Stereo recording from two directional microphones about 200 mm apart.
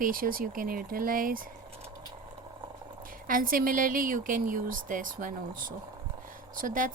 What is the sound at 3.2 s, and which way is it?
Speech, 45° right (ahead or behind).